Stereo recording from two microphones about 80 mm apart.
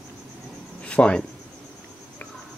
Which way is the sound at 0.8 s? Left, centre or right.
Centre.